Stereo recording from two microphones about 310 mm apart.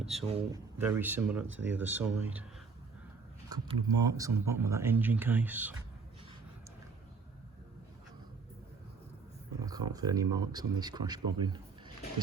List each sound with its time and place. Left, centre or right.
0.0 s speech: centre
0.3 s speech: centre
0.8 s speech: centre
1.5 s speech: right
1.7 s speech: centre
3.5 s speech: centre
9.6 s speech: centre